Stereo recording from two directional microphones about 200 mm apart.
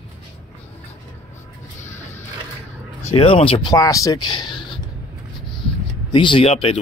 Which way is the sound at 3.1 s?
30° left (ahead or behind).